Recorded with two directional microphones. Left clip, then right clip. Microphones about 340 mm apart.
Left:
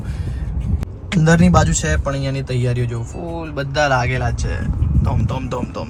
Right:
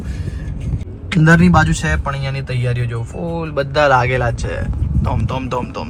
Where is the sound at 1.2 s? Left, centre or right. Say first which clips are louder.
Right 3 dB; centre.